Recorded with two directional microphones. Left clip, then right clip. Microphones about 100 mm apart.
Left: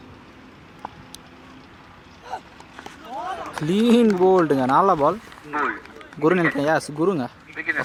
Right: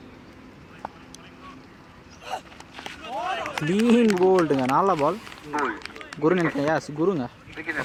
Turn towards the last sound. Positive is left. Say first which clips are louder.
# left 5 dB
turn(degrees=50)  # may be behind; listen again after turning